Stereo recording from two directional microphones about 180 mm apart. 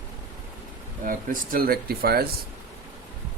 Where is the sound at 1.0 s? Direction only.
50° right (ahead or behind).